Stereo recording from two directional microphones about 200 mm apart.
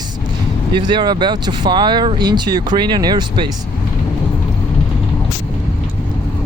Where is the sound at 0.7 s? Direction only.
25° right (ahead or behind).